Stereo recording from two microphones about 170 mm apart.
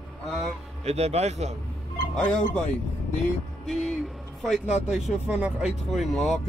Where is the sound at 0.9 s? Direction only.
40° right (ahead or behind).